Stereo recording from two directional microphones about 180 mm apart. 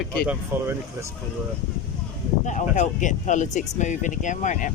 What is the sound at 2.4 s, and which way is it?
Speech, 45° left (ahead or behind).